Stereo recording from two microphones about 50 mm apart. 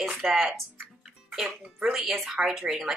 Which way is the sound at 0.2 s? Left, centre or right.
Centre.